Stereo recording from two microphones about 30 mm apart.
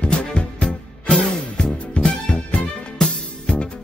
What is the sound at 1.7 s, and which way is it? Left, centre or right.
Music, centre.